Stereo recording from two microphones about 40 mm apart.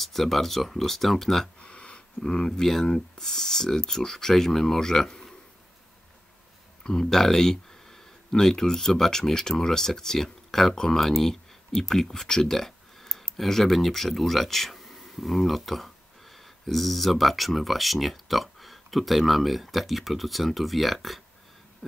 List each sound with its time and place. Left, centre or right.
0.0 s speech: centre
1.6 s a sound: left
2.6 s speech: centre
6.8 s speech: centre